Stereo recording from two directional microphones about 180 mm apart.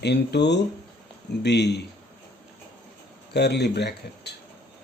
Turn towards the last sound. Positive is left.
turn(degrees=70)  # may be behind; listen again after turning